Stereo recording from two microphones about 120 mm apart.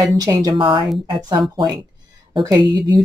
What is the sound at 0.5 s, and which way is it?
Speech, 45° right (ahead or behind).